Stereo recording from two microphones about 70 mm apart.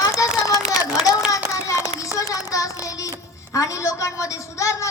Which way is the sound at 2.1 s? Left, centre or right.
Left.